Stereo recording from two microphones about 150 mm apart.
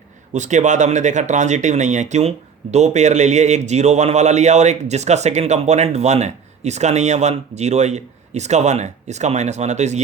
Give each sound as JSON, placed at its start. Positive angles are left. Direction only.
{"t": 0.3, "sound": "a man's voice", "side_deg": -55}